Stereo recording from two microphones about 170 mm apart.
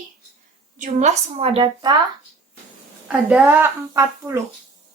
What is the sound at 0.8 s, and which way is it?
Child singing, 50° right (ahead or behind).